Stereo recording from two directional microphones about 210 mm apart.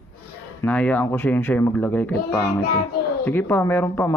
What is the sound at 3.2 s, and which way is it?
Speech, 10° left (ahead or behind).